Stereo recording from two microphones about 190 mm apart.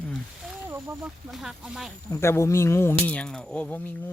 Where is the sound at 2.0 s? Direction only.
15° left (ahead or behind).